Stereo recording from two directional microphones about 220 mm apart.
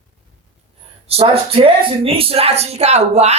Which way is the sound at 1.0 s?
30° right (ahead or behind).